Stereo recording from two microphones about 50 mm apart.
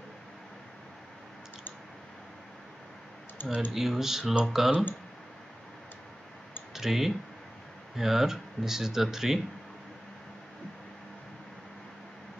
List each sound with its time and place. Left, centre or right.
3.4 s speech: left
3.7 s speech: centre
6.7 s speech: centre